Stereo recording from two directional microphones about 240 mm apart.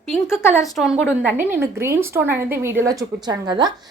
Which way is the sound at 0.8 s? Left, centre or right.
Centre.